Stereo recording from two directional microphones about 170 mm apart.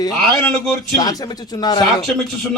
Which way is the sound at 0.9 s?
20° left (ahead or behind).